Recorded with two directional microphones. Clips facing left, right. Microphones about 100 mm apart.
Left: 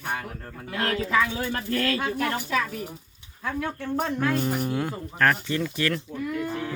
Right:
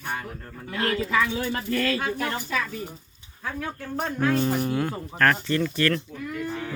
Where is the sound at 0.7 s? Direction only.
Centre (ahead or behind).